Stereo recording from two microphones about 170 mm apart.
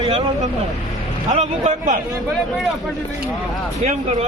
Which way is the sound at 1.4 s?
45° right (ahead or behind).